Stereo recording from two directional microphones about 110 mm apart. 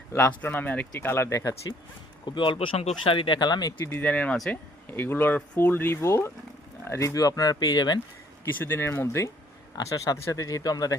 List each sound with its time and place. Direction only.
0.1 s speech: 20° left (ahead or behind)
2.2 s speech: 45° left (ahead or behind)
2.6 s speech: 65° left (ahead or behind)
3.0 s speech: 50° left (ahead or behind)
3.8 s speech: 20° left (ahead or behind); by 8.0 s 40° left (ahead or behind)
8.5 s speech: 20° left (ahead or behind)